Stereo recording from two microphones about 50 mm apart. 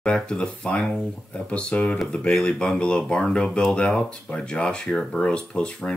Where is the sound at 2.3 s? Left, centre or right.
Centre.